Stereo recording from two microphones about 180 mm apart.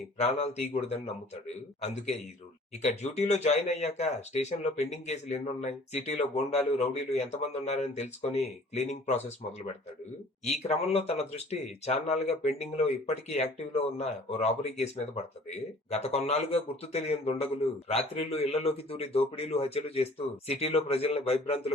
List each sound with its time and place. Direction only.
0.2 s speech: 35° left (ahead or behind)
2.8 s speech: 40° left (ahead or behind)
10.6 s speech: 35° left (ahead or behind)